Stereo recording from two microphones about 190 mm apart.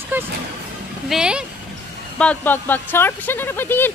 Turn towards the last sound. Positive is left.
turn(degrees=10)  # may be behind; listen again after turning